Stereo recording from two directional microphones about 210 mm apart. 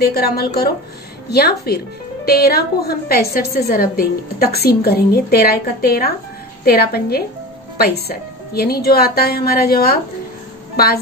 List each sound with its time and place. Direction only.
0.0 s a woman's voice: 50° left (ahead or behind)